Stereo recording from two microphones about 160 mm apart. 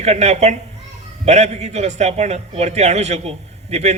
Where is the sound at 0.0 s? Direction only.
45° right (ahead or behind).